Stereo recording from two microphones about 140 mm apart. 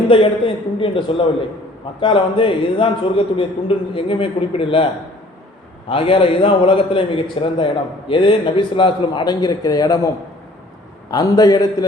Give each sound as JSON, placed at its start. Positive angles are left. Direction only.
{"t": 0.1, "sound": "a man's voice", "side_deg": 40}
{"t": 5.9, "sound": "a man's voice", "side_deg": 40}
{"t": 11.1, "sound": "a man's voice", "side_deg": 25}